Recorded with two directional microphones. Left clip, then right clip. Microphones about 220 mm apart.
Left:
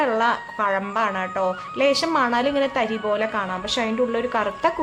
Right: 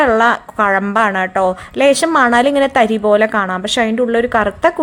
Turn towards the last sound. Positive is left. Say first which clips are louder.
# right 8 dB
turn(degrees=-25)  # may be behind; listen again after turning